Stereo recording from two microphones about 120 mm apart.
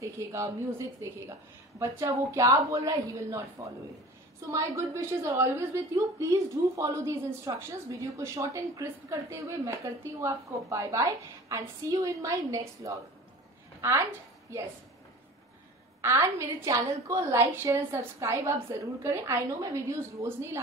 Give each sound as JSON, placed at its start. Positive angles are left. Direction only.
{"t": 0.0, "sound": "a woman's voice", "side_deg": -25}
{"t": 16.0, "sound": "a woman's voice", "side_deg": -20}